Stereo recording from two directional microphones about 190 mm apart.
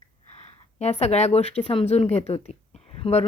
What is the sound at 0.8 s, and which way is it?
Speech, 35° left (ahead or behind).